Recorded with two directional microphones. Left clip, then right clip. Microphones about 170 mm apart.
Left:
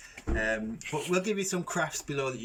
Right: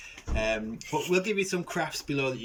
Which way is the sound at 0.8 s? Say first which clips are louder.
Right 3 dB; centre (ahead or behind).